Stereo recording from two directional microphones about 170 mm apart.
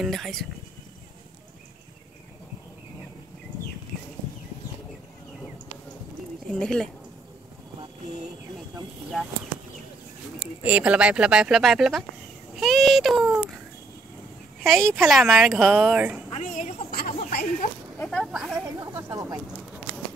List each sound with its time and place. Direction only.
0.0 s speech: centre (ahead or behind)
6.5 s speech: 5° left (ahead or behind)
10.4 s speech: 10° right (ahead or behind)
14.6 s a woman's voice: 5° left (ahead or behind)
16.3 s a sound: 45° left (ahead or behind)
16.9 s chatter: 60° left (ahead or behind)
17.9 s a sound: 10° left (ahead or behind)
18.2 s speech: 5° right (ahead or behind)
18.8 s a sound: 20° right (ahead or behind)